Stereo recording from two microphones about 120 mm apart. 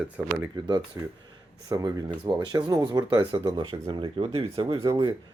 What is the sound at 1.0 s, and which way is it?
Speech, 25° right (ahead or behind).